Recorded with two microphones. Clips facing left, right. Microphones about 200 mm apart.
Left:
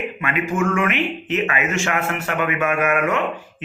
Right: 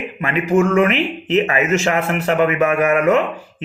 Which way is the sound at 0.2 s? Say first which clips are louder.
Right 7 dB; 35° right (ahead or behind).